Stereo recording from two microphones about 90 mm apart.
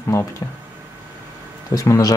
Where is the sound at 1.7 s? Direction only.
40° left (ahead or behind).